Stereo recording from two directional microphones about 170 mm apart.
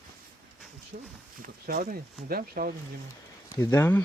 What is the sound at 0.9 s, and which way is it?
Speech, 55° right (ahead or behind).